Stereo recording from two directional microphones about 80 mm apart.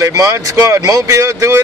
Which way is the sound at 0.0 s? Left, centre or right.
Right.